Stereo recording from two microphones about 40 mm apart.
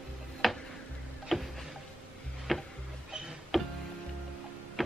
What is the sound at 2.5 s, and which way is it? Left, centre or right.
Music, centre.